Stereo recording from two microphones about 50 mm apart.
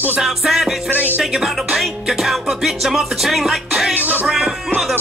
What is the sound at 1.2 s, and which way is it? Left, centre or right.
Music, centre.